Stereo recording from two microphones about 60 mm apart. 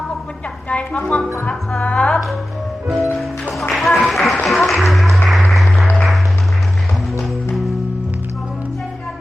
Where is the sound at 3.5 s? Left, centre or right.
Centre.